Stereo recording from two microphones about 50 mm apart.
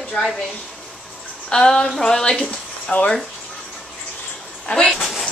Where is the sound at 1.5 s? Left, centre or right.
Centre.